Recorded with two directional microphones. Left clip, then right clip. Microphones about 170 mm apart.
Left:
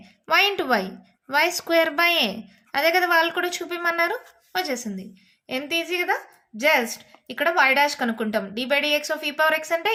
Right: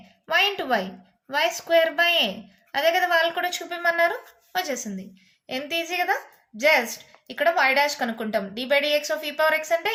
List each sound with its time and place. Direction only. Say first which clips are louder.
0.3 s a woman's voice: left 2 dB; 40° left (ahead or behind)